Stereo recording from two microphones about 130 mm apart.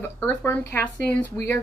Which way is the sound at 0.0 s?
15° left (ahead or behind).